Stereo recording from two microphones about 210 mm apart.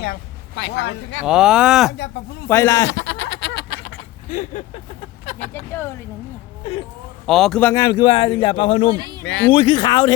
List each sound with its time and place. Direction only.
0.0 s speech: 55° left (ahead or behind)
1.2 s speech: 5° right (ahead or behind)
2.5 s speech: 15° left (ahead or behind)
2.9 s a sound: 65° left (ahead or behind); by 4.8 s 35° left (ahead or behind)
5.2 s vehicle: 30° left (ahead or behind)
5.5 s speech: 10° left (ahead or behind)
7.3 s speech: centre (ahead or behind); by 9.0 s 25° left (ahead or behind)
9.0 s speech: 20° right (ahead or behind)
9.2 s speech: 60° left (ahead or behind)
9.5 s speech: 25° left (ahead or behind)